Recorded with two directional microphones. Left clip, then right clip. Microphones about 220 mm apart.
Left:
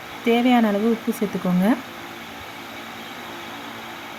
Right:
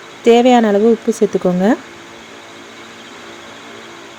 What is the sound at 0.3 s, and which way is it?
Speech, 25° right (ahead or behind).